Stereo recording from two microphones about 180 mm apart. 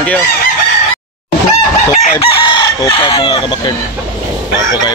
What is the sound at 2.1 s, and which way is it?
Chicken, 25° left (ahead or behind).